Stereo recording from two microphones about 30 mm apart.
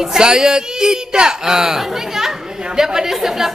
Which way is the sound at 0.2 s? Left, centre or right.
Right.